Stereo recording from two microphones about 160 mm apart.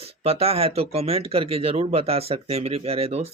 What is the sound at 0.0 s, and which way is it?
Speech, 40° right (ahead or behind).